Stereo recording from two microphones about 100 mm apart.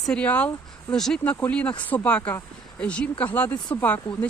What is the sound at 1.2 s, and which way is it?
Speech, 15° left (ahead or behind).